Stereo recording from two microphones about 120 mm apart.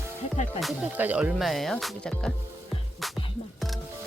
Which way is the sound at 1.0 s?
15° right (ahead or behind).